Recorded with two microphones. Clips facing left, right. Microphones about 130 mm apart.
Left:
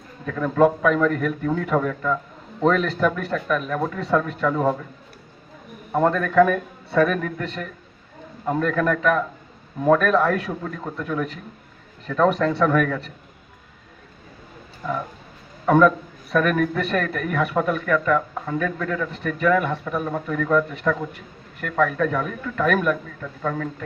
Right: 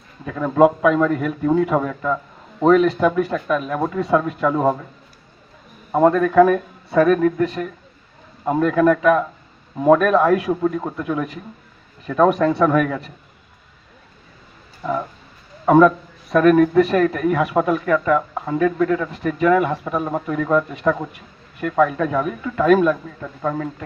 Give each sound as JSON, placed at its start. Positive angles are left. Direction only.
{"t": 0.3, "sound": "a man's voice", "side_deg": -20}
{"t": 5.9, "sound": "a man's voice", "side_deg": -15}
{"t": 14.8, "sound": "a man's voice", "side_deg": -20}